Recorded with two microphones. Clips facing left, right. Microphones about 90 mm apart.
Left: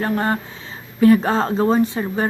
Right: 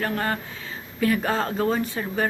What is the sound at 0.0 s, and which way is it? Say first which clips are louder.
Speech: left 5 dB; 25° left (ahead or behind).